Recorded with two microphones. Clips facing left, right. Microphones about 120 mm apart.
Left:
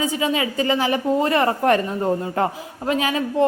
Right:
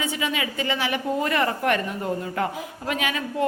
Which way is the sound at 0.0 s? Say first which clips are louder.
Left 5 dB; 35° left (ahead or behind).